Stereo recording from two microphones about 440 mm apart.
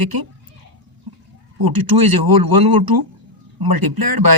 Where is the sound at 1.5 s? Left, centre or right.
Right.